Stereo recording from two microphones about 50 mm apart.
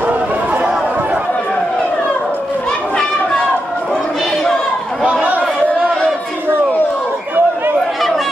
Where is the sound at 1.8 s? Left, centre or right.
Left.